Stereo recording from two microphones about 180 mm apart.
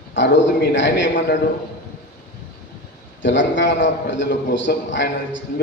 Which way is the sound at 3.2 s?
90° left.